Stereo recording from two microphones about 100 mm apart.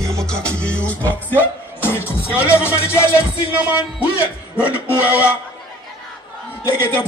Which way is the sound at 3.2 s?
15° right (ahead or behind).